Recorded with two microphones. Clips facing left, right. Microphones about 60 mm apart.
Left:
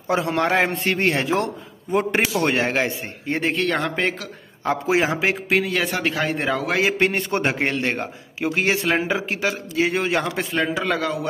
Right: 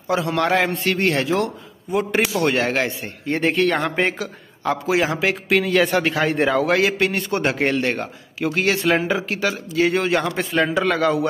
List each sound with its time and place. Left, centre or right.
0.1 s a man's voice: left
3.3 s a man's voice: centre
4.6 s a man's voice: left
5.5 s a man's voice: centre
6.8 s a man's voice: left
7.8 s a man's voice: centre